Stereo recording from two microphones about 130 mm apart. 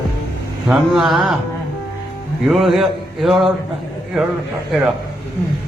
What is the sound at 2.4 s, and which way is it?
Speech, centre (ahead or behind).